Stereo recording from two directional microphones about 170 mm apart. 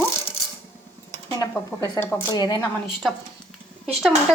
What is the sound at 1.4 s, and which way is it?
A woman's voice, 15° left (ahead or behind).